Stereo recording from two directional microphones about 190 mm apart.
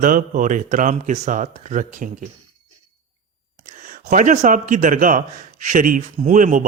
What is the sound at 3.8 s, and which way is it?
A man's voice, 45° right (ahead or behind).